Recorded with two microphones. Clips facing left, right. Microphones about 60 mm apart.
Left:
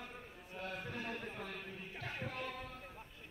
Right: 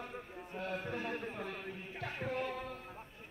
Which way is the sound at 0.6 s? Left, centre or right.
Right.